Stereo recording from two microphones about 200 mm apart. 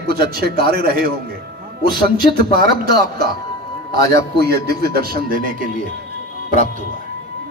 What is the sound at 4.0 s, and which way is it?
Speech, 15° left (ahead or behind).